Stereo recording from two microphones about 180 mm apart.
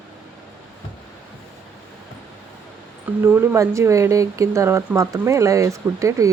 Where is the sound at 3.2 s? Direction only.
15° right (ahead or behind).